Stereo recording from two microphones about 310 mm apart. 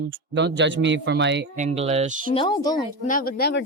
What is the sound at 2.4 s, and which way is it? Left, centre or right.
Speech, centre.